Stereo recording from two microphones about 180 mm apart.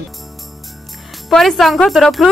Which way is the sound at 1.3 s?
Centre (ahead or behind).